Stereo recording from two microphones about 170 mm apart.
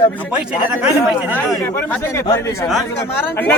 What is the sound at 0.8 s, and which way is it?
Speech, 5° right (ahead or behind).